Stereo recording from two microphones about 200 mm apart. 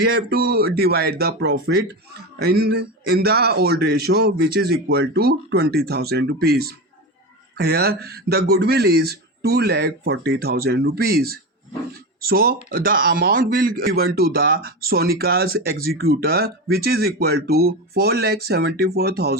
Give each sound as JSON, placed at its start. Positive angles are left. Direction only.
{"t": 0.0, "sound": "speech", "side_deg": -50}